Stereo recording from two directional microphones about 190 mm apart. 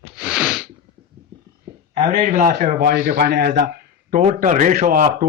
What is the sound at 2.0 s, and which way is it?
Speech, 40° right (ahead or behind).